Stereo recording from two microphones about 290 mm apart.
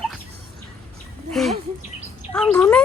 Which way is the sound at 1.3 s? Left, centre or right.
Centre.